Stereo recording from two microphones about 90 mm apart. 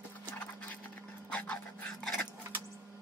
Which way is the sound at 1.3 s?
15° left (ahead or behind).